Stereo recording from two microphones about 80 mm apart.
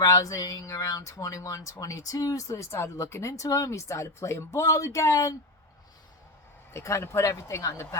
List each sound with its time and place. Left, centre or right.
0.0 s speech: left
6.7 s speech: left